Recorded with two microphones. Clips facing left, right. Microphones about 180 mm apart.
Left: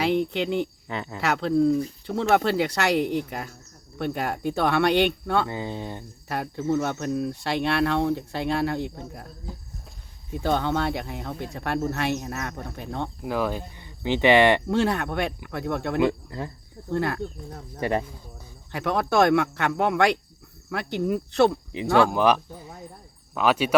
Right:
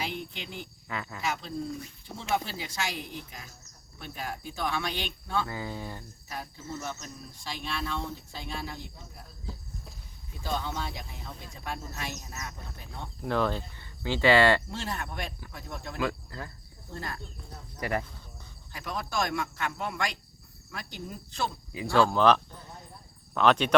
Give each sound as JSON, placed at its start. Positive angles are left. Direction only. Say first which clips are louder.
{"t": 0.0, "sound": "speech", "louder": "left 13 dB", "side_deg": 65}
{"t": 0.9, "sound": "speech", "louder": "left 5 dB", "side_deg": 25}
{"t": 1.2, "sound": "speech", "louder": "left 14 dB", "side_deg": 65}
{"t": 5.5, "sound": "speech", "louder": "left 5 dB", "side_deg": 25}
{"t": 6.2, "sound": "speech", "louder": "left 14 dB", "side_deg": 70}
{"t": 10.4, "sound": "speech", "louder": "left 10 dB", "side_deg": 65}
{"t": 13.2, "sound": "speech", "louder": "even", "side_deg": 10}
{"t": 14.7, "sound": "speech", "louder": "left 13 dB", "side_deg": 65}
{"t": 16.0, "sound": "speech", "louder": "left 6 dB", "side_deg": 25}
{"t": 16.9, "sound": "speech", "louder": "left 13 dB", "side_deg": 65}
{"t": 17.7, "sound": "speech", "louder": "left 6 dB", "side_deg": 25}
{"t": 18.7, "sound": "speech", "louder": "left 11 dB", "side_deg": 65}
{"t": 22.1, "sound": "speech", "louder": "left 2 dB", "side_deg": 10}